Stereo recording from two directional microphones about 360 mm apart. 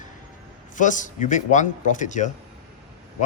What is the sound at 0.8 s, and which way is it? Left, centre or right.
Speech, left.